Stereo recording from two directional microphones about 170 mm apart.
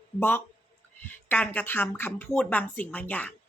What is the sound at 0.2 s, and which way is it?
Speech, 10° left (ahead or behind).